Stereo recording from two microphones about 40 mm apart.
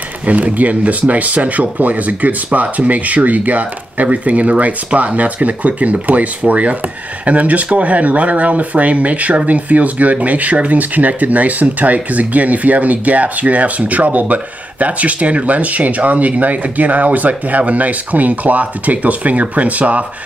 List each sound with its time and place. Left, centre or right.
0.2 s speech: right